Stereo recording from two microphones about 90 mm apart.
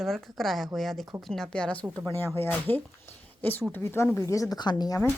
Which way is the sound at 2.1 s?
25° left (ahead or behind).